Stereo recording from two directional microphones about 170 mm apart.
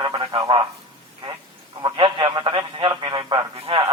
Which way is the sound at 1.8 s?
30° right (ahead or behind).